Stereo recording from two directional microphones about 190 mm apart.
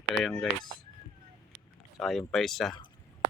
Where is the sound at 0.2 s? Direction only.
Centre (ahead or behind).